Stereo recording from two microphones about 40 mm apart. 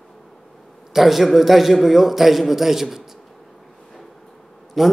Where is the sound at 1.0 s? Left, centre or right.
Centre.